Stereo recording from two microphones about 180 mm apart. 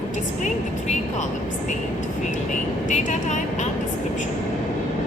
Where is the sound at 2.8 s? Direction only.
40° left (ahead or behind).